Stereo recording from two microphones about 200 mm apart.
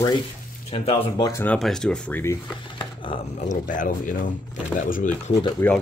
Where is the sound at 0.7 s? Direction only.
30° left (ahead or behind).